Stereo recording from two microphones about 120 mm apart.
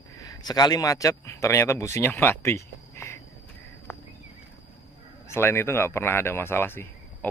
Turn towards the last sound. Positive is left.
turn(degrees=20)  # may be behind; listen again after turning